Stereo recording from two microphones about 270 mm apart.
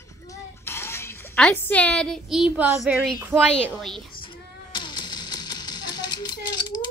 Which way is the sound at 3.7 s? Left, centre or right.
Centre.